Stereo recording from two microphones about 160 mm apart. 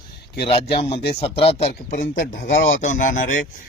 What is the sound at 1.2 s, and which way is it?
Speech, 40° left (ahead or behind).